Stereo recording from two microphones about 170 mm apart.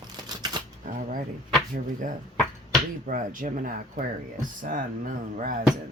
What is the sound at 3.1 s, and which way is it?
Speech, 50° right (ahead or behind).